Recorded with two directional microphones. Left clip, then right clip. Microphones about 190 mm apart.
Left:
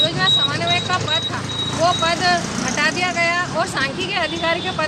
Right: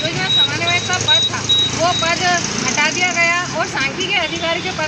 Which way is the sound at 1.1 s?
20° left (ahead or behind).